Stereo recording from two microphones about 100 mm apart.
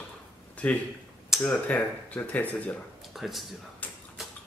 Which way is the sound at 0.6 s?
15° left (ahead or behind).